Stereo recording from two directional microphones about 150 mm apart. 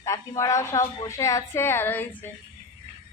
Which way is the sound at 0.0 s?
20° left (ahead or behind).